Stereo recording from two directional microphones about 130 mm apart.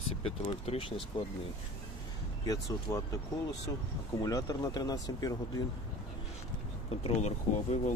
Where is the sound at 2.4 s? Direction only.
25° left (ahead or behind).